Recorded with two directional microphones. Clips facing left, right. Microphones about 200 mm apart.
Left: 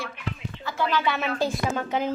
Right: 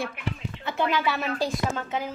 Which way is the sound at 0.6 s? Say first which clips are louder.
Right 1 dB; 20° right (ahead or behind).